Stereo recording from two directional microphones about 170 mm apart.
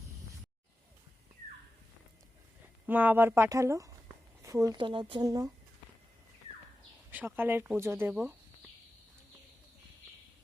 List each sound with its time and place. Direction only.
2.8 s speech: 10° right (ahead or behind)
7.1 s speech: 10° right (ahead or behind)